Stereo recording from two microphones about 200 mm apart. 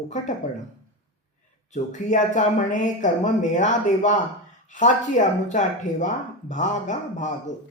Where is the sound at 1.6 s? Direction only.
40° left (ahead or behind).